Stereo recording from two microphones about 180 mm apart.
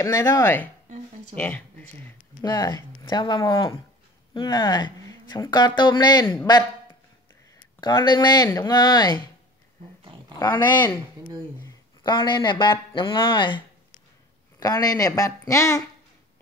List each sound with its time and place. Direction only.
0.0 s speech: 20° left (ahead or behind)
2.4 s speech: 20° left (ahead or behind)
7.8 s speech: 25° left (ahead or behind)
10.4 s speech: 25° left (ahead or behind)
14.6 s speech: 20° left (ahead or behind)